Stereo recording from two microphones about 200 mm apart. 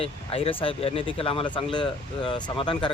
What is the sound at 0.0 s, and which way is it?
Speech, 30° left (ahead or behind).